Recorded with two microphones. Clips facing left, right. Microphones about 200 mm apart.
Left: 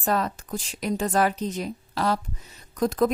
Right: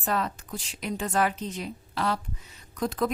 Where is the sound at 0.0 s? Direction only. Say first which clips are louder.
Left 4 dB; 40° left (ahead or behind).